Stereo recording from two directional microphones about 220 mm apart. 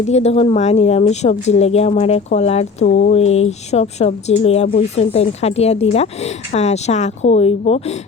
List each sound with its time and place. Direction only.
0.0 s speech: 30° left (ahead or behind)